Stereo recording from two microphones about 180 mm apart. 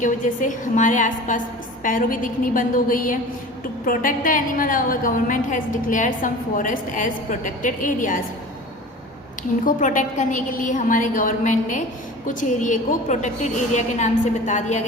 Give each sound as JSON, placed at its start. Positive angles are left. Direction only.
{"t": 0.0, "sound": "a woman's voice", "side_deg": 45}
{"t": 9.6, "sound": "a woman's voice", "side_deg": 45}